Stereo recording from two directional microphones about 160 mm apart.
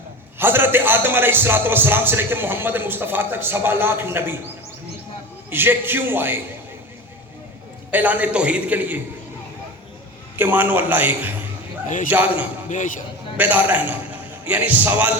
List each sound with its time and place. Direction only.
0.3 s music: 15° right (ahead or behind)
5.5 s music: 15° right (ahead or behind)
7.9 s music: 10° right (ahead or behind)
10.3 s music: 10° right (ahead or behind)
12.7 s speech: 50° left (ahead or behind)
13.3 s a man's voice: 10° right (ahead or behind)